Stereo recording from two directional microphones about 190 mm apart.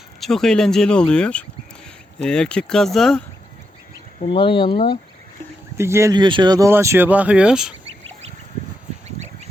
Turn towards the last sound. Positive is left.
turn(degrees=-5)  # may be behind; listen again after turning